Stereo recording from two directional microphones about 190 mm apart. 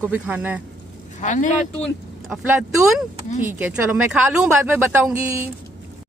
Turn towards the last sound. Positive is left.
turn(degrees=-10)  # may be behind; listen again after turning